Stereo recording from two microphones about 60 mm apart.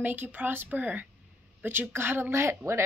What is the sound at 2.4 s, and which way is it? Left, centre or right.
Speech, right.